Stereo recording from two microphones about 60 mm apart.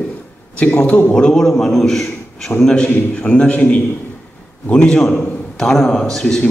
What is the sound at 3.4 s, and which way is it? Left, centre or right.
Speech, left.